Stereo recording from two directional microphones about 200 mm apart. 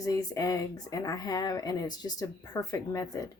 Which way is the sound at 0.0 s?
15° left (ahead or behind).